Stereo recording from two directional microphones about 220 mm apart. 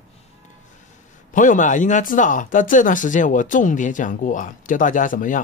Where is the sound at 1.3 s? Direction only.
35° left (ahead or behind).